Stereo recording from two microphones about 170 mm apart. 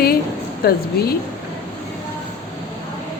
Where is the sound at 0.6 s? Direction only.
65° left (ahead or behind).